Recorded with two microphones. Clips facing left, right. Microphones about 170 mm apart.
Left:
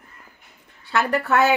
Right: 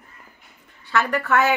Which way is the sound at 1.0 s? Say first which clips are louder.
Left 2 dB; 30° left (ahead or behind).